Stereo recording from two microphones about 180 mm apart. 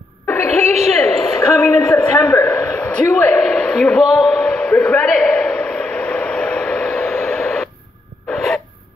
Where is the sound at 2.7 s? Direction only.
5° left (ahead or behind).